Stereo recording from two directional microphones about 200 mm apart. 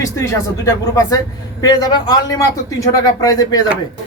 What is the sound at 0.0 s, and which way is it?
A man's voice, 15° left (ahead or behind).